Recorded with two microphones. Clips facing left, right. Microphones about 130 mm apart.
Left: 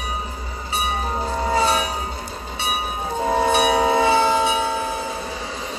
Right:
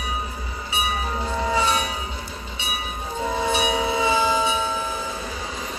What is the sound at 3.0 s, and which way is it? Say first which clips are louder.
Train: left 5 dB; 50° left (ahead or behind).